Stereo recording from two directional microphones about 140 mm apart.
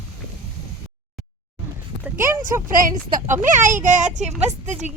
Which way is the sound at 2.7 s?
75° right (ahead or behind).